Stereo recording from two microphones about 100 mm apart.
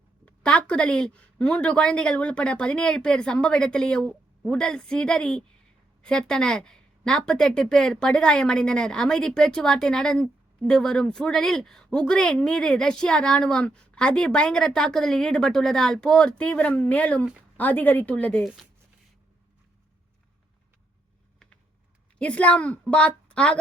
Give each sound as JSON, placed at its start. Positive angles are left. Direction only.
{"t": 0.3, "sound": "speech", "side_deg": 10}
{"t": 22.2, "sound": "speech", "side_deg": 10}